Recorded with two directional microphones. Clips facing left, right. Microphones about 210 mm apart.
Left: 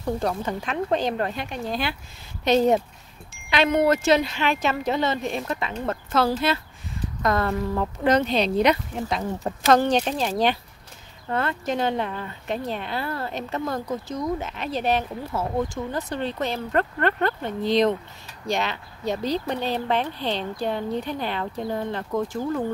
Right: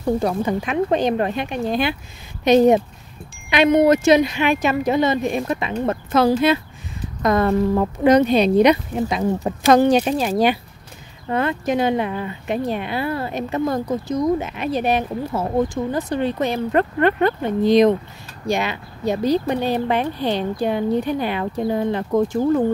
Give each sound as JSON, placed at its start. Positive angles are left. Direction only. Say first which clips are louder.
{"t": 0.2, "sound": "speech", "louder": "right 6 dB", "side_deg": -10}